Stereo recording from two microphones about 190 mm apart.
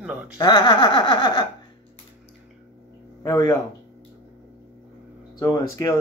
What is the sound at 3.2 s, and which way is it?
Speech, 15° left (ahead or behind).